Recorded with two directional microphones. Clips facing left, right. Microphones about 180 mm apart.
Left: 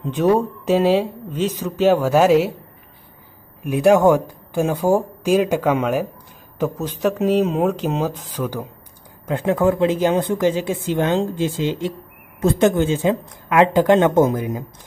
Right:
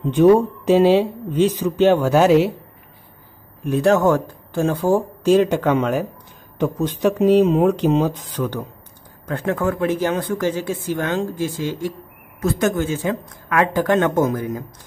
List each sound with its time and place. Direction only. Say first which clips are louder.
0.1 s speech: right 4 dB; centre (ahead or behind)
3.7 s speech: left 2 dB; 15° left (ahead or behind)